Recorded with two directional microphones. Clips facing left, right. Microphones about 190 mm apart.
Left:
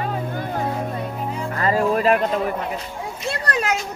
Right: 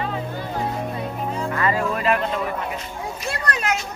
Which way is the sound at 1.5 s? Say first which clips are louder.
Left 5 dB; 40° left (ahead or behind).